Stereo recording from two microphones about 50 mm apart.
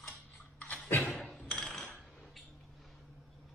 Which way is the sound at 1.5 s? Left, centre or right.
Centre.